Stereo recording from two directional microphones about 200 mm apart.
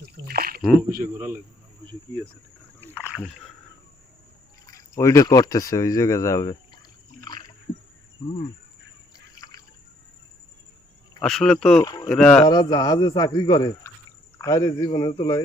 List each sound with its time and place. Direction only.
0.0 s a sound: 50° right (ahead or behind)
0.9 s a man's voice: 45° right (ahead or behind)
3.2 s speech: centre (ahead or behind)
4.6 s speech: 15° left (ahead or behind)
7.2 s a sound: 20° left (ahead or behind)
8.2 s speech: 25° left (ahead or behind)
9.1 s drip: 20° left (ahead or behind)
11.2 s speech: 5° left (ahead or behind)
11.8 s speech: 20° left (ahead or behind)
12.0 s speech: 5° left (ahead or behind)
12.5 s speech: 20° left (ahead or behind)